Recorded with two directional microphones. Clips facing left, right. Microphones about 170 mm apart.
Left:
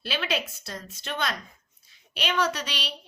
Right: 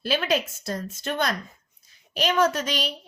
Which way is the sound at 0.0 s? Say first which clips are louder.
Right 6 dB; 45° right (ahead or behind).